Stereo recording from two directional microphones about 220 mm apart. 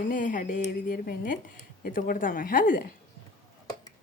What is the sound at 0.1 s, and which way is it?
Speech, 35° left (ahead or behind).